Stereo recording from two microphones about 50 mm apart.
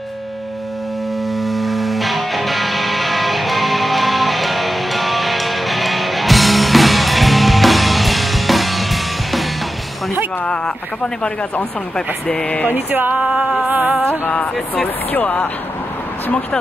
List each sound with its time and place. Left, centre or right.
1.4 s music: centre
12.3 s speech: centre
12.9 s a sound: right
13.2 s music: centre
15.1 s speech: left